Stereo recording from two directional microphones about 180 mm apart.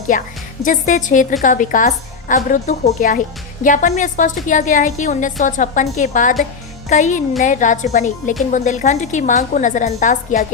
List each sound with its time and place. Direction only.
0.1 s a woman's voice: 45° left (ahead or behind)